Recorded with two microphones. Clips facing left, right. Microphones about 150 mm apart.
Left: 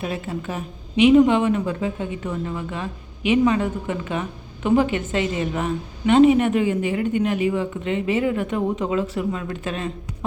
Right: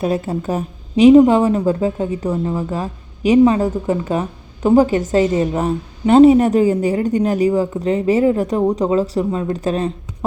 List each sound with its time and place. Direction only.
0.0 s a woman's voice: 40° right (ahead or behind)